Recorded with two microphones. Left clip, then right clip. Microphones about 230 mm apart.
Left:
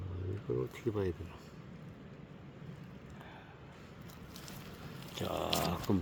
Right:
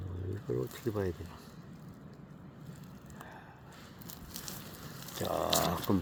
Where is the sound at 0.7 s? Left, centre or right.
Centre.